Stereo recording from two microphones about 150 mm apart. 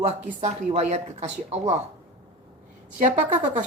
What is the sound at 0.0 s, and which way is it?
Speech, 50° right (ahead or behind).